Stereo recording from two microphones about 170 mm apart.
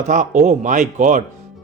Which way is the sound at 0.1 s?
45° right (ahead or behind).